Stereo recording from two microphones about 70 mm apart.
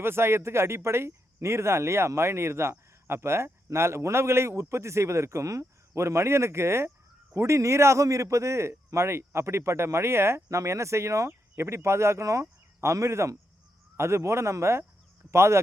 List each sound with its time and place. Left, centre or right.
0.0 s a man's voice: right